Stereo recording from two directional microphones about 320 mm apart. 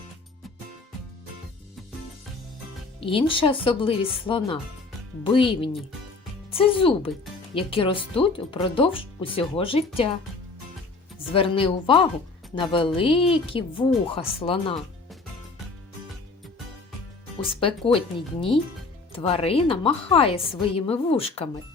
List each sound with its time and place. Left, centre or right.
3.0 s speech: centre
11.3 s speech: centre
17.5 s speech: centre